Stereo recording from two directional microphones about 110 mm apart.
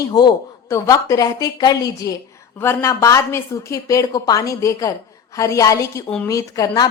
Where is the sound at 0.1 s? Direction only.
40° left (ahead or behind).